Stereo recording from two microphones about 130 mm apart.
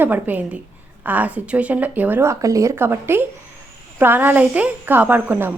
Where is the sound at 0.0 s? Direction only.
15° right (ahead or behind).